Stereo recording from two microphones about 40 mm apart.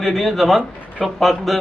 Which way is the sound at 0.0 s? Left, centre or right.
Centre.